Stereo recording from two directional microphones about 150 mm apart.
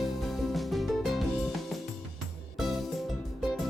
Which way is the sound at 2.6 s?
Centre (ahead or behind).